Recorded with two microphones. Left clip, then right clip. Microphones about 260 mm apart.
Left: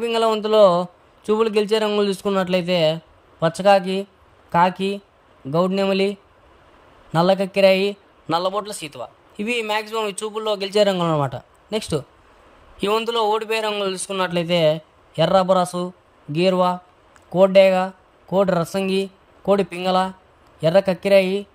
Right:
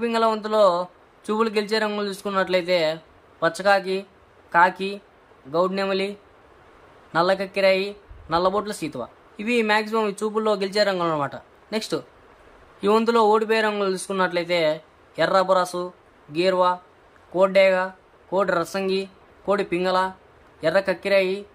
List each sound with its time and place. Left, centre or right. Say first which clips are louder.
0.0 s a man's voice: left 2 dB; left